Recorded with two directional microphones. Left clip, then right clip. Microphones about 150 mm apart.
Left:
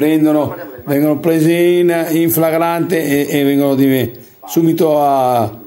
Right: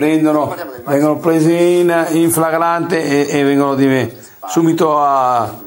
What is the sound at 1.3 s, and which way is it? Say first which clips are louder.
Mantra: even; 35° left (ahead or behind).